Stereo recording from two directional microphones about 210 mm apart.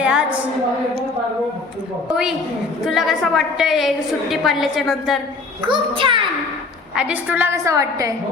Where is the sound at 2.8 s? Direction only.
Centre (ahead or behind).